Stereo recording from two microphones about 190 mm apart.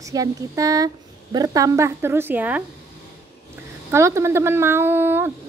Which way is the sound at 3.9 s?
15° right (ahead or behind).